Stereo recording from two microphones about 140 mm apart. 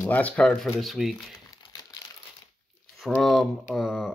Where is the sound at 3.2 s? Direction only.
Centre (ahead or behind).